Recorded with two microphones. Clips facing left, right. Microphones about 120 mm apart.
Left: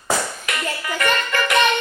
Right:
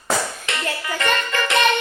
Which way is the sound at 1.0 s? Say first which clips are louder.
Left 1 dB; 25° right (ahead or behind).